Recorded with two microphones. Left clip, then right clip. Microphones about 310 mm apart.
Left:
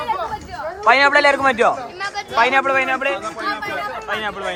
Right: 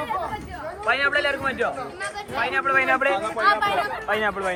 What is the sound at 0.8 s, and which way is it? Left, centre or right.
A man's voice, centre.